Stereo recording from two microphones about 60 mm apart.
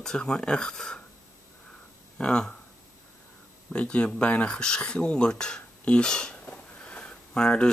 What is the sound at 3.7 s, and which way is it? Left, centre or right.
Speech, left.